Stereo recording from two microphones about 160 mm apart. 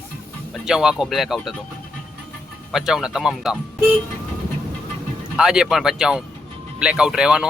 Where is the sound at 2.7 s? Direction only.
Centre (ahead or behind).